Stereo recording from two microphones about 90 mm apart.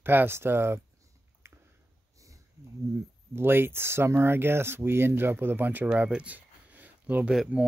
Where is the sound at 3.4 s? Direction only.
25° right (ahead or behind).